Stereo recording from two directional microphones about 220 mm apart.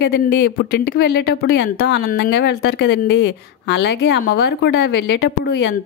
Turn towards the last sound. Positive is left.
turn(degrees=50)  # may be behind; listen again after turning